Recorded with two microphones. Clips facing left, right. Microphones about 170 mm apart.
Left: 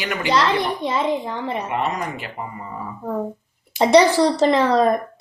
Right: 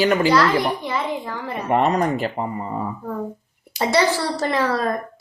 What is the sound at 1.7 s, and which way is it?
Speech, 40° right (ahead or behind).